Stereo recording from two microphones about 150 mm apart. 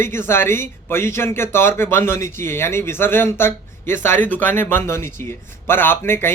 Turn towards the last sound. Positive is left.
turn(degrees=15)  # may be behind; listen again after turning